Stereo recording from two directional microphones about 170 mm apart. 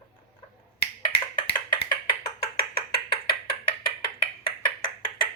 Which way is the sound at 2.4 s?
65° left (ahead or behind).